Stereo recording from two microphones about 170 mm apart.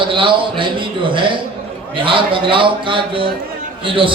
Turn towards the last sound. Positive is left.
turn(degrees=-30)  # may be behind; listen again after turning